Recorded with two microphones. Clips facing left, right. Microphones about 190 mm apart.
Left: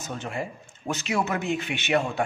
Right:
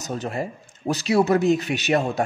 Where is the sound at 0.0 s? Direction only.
40° right (ahead or behind).